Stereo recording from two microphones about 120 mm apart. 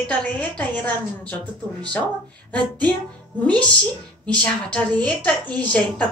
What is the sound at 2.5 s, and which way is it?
Speech, 10° left (ahead or behind).